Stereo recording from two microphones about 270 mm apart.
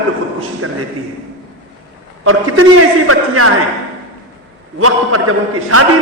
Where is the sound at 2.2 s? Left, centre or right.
Right.